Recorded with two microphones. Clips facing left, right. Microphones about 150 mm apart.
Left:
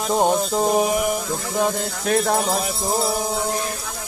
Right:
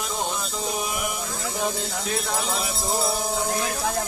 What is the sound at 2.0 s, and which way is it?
Music, 50° left (ahead or behind).